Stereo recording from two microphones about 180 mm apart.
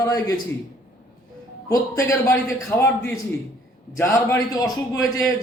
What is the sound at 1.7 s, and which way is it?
Speech, 20° left (ahead or behind).